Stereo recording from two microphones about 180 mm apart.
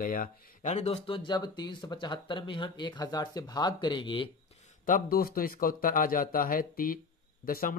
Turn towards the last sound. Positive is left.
turn(degrees=50)  # may be behind; listen again after turning